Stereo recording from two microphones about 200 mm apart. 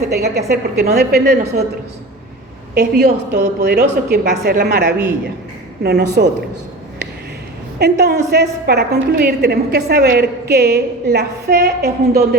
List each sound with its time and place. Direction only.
0.1 s a woman's voice: 55° right (ahead or behind)
2.7 s a woman's voice: 55° right (ahead or behind)
7.8 s a woman's voice: 55° right (ahead or behind)